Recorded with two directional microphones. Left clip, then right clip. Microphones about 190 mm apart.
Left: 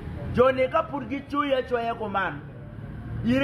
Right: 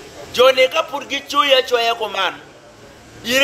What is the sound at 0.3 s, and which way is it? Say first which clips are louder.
Speech: right 8 dB; 15° right (ahead or behind).